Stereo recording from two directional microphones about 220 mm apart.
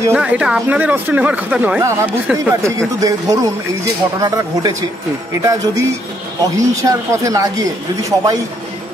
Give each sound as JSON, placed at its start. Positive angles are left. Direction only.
{"t": 0.1, "sound": "speech", "side_deg": -5}